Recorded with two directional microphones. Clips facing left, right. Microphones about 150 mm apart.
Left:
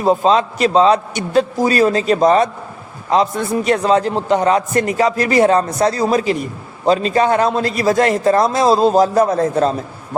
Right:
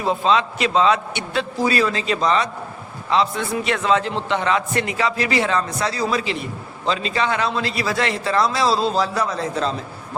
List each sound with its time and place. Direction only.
0.0 s a man's voice: 40° left (ahead or behind)